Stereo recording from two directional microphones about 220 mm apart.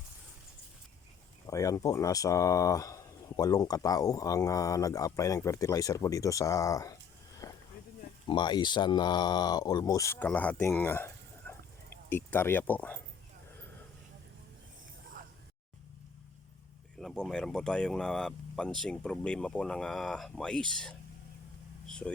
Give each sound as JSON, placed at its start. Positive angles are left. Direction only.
{"t": 1.5, "sound": "speech", "side_deg": 15}
{"t": 7.4, "sound": "a sound", "side_deg": 15}
{"t": 8.3, "sound": "speech", "side_deg": 20}
{"t": 17.0, "sound": "speech", "side_deg": 0}
{"t": 21.8, "sound": "vehicle", "side_deg": 5}